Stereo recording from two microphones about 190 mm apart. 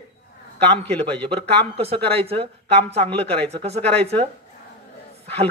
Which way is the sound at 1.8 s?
30° right (ahead or behind).